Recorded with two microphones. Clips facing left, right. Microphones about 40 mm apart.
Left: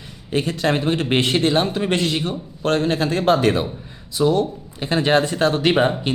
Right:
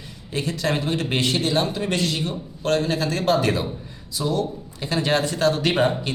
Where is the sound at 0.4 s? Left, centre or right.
Left.